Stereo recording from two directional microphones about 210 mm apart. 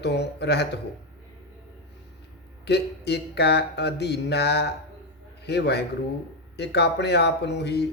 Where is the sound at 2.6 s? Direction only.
50° left (ahead or behind).